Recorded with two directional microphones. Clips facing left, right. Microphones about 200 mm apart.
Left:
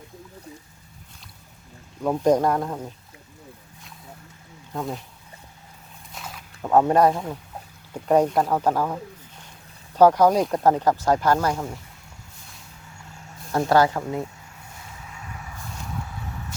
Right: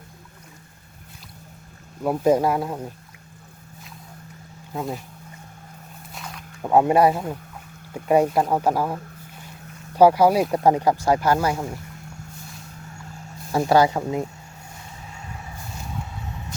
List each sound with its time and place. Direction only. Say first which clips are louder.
2.0 s speech: right 1 dB; 5° right (ahead or behind)
4.7 s speech: right 1 dB; 5° right (ahead or behind)
6.1 s boat: right 1 dB; centre (ahead or behind)
6.7 s speech: right 1 dB; 10° right (ahead or behind)
13.5 s speech: right 1 dB; 10° right (ahead or behind)
15.0 s vehicle: right 1 dB; 30° right (ahead or behind)